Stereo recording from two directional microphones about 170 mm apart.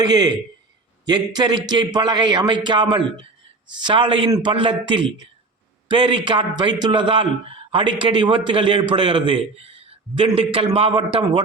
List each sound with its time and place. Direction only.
0.0 s a man's voice: 25° right (ahead or behind)